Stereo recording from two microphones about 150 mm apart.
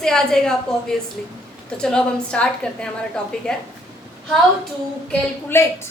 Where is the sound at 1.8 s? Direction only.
5° left (ahead or behind).